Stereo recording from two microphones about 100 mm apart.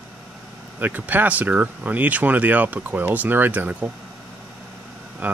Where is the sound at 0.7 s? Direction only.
15° right (ahead or behind).